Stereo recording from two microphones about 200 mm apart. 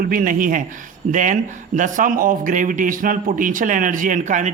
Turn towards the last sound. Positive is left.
turn(degrees=-40)  # may be behind; listen again after turning